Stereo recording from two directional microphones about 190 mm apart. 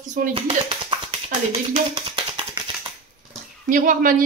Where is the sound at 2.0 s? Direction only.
30° right (ahead or behind).